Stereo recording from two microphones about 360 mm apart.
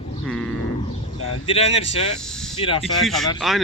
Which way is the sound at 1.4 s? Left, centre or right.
Centre.